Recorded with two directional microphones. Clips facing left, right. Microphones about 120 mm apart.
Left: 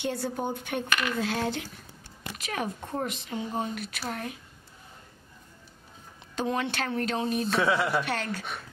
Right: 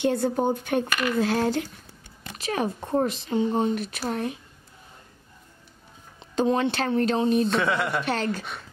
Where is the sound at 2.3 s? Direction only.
30° right (ahead or behind).